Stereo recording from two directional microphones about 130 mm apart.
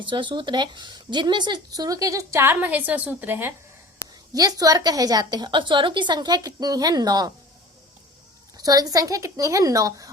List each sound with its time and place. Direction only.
0.0 s speech: 40° right (ahead or behind); by 3.5 s 15° right (ahead or behind)
4.4 s a woman's voice: 30° right (ahead or behind)
8.5 s speech: 30° right (ahead or behind)